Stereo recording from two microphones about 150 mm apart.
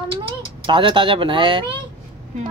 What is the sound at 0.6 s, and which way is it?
Speech, 35° right (ahead or behind).